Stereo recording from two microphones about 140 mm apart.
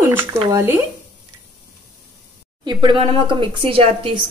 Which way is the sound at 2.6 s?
30° right (ahead or behind).